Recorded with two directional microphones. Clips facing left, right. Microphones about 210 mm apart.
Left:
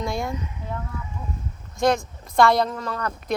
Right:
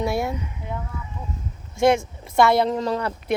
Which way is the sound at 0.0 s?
5° right (ahead or behind).